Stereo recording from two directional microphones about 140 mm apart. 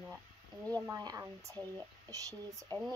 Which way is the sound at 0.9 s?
25° right (ahead or behind).